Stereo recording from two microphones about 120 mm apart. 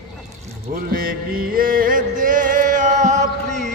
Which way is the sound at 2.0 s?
90° right.